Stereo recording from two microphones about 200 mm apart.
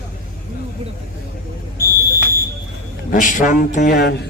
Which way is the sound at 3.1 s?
40° left (ahead or behind).